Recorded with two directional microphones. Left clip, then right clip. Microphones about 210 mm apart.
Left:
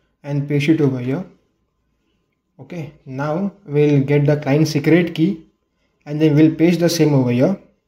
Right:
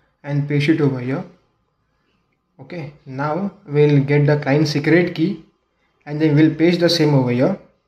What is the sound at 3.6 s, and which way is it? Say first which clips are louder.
Speech: right 1 dB; 25° left (ahead or behind).